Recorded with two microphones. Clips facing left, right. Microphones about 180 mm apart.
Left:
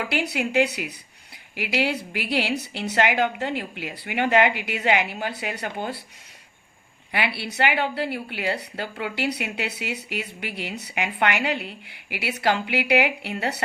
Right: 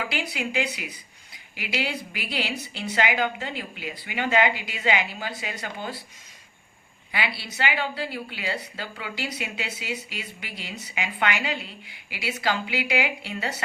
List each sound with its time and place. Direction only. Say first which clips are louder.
0.1 s speech: left 5 dB; 65° left (ahead or behind)
7.1 s speech: left 4 dB; 60° left (ahead or behind)